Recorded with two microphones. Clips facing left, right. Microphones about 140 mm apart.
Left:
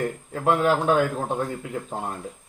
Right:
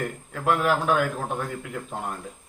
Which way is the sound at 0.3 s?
30° left (ahead or behind).